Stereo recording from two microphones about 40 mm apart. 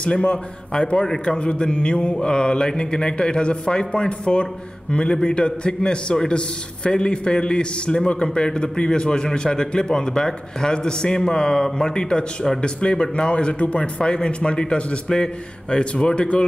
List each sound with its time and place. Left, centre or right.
0.9 s a man's voice: centre